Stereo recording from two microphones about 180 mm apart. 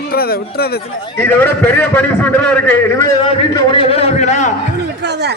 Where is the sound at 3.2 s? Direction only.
30° left (ahead or behind).